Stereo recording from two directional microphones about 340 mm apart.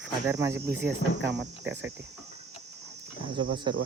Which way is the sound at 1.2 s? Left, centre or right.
Right.